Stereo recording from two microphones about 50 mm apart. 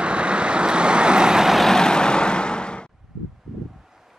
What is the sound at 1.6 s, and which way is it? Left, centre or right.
Vehicle, centre.